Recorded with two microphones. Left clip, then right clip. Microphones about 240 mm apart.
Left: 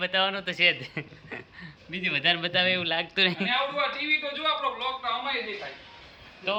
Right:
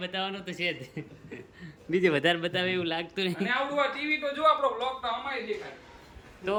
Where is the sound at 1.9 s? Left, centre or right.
Centre.